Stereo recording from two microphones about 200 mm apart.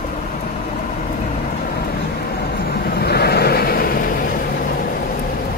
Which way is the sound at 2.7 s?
50° left (ahead or behind).